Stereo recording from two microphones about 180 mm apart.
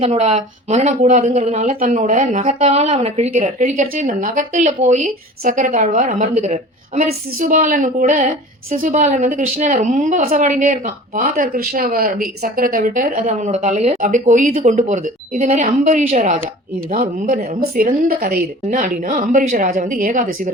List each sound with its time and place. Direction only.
0.0 s a woman's voice: 35° right (ahead or behind)